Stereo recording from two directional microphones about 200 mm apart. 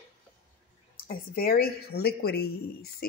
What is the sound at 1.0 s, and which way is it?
Speech, 45° left (ahead or behind).